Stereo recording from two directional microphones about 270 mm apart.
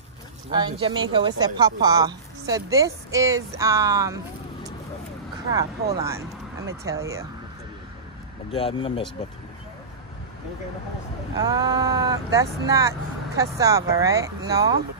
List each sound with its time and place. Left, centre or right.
0.5 s a woman's voice: centre
5.6 s a woman's voice: centre
8.5 s speech: left
11.3 s a woman's voice: centre